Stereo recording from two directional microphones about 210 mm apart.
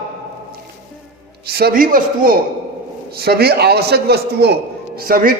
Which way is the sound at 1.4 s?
45° right (ahead or behind).